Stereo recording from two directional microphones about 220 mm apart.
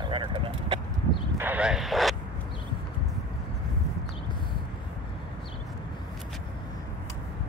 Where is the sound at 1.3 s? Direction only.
5° right (ahead or behind).